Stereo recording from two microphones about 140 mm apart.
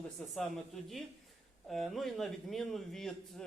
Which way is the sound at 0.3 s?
Centre (ahead or behind).